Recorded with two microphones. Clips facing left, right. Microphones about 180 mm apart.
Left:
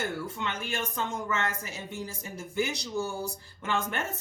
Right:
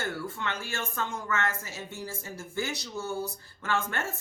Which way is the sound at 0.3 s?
20° left (ahead or behind).